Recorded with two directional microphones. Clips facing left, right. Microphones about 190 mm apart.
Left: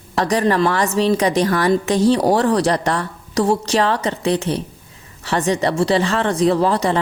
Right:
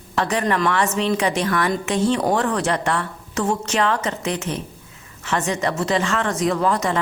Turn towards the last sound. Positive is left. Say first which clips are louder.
# left 4 dB
turn(degrees=35)  # may be behind; listen again after turning